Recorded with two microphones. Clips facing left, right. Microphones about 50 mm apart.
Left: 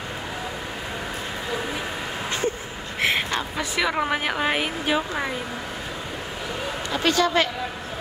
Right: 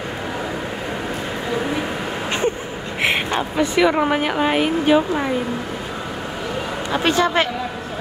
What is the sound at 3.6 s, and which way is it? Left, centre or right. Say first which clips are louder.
Speech: right 9 dB; centre.